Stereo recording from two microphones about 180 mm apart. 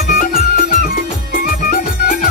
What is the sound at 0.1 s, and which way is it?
Music, 50° left (ahead or behind).